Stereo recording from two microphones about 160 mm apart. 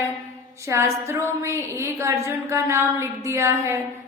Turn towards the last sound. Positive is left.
turn(degrees=-20)  # may be behind; listen again after turning